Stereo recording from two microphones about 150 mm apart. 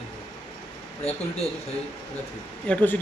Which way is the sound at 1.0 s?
45° left (ahead or behind).